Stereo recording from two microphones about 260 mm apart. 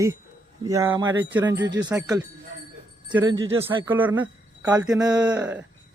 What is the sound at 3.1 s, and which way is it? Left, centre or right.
Speech, centre.